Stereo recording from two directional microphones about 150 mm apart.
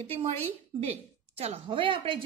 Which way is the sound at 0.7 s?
40° right (ahead or behind).